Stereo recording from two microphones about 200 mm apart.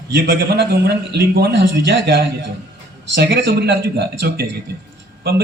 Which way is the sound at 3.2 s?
55° right (ahead or behind).